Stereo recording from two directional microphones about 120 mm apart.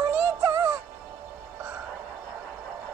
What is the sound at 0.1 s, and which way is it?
Synthetic singing, 15° right (ahead or behind).